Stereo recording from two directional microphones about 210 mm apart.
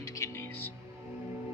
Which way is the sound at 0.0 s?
15° left (ahead or behind).